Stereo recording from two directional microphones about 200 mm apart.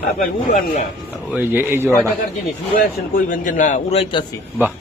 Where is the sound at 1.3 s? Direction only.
10° right (ahead or behind).